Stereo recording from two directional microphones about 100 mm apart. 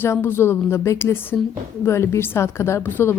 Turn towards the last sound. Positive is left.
turn(degrees=20)  # may be behind; listen again after turning